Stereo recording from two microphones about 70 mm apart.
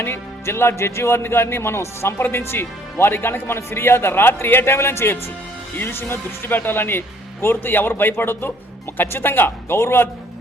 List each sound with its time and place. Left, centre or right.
0.0 s a man's voice: left